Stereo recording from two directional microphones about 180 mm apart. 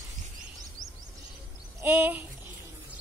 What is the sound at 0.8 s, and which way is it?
Bird, 45° right (ahead or behind).